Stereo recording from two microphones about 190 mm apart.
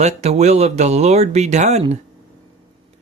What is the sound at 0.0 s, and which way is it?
Speech, 35° right (ahead or behind).